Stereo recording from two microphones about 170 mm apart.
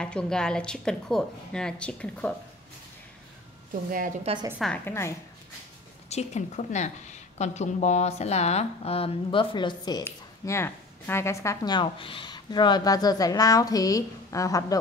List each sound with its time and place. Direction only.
0.0 s speech: 5° left (ahead or behind)
4.2 s a woman's voice: 35° right (ahead or behind)
4.8 s speech: 15° left (ahead or behind)
6.0 s a woman's voice: 40° left (ahead or behind); by 10.0 s 25° left (ahead or behind)
10.0 s speech: 15° left (ahead or behind)